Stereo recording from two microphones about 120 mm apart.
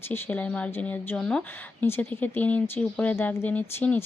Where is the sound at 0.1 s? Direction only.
15° left (ahead or behind).